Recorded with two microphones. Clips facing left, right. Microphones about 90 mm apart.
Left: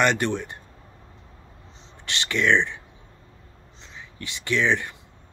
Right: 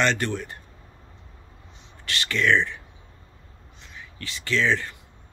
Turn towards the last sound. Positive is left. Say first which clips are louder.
# left 1 dB
turn(degrees=20)  # may be behind; listen again after turning